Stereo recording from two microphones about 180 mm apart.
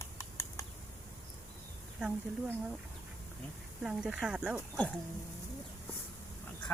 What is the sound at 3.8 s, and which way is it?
Speech, 5° right (ahead or behind).